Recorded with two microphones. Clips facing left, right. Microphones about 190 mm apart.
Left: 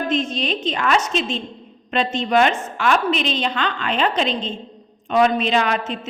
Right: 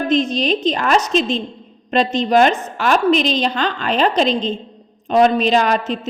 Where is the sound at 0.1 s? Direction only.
35° right (ahead or behind).